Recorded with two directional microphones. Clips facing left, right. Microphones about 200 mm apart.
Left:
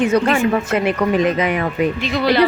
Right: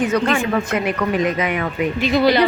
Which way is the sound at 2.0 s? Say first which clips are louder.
Right 2 dB; centre (ahead or behind).